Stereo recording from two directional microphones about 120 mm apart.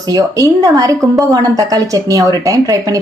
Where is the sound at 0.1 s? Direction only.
30° right (ahead or behind).